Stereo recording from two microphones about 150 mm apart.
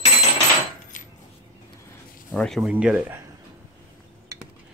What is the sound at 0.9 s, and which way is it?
Cutlery, 60° left (ahead or behind).